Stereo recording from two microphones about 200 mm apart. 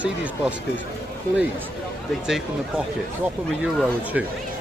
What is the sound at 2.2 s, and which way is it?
Speech, 5° right (ahead or behind).